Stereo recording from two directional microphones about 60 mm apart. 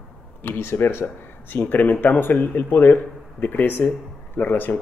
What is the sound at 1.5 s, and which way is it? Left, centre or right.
Speech, left.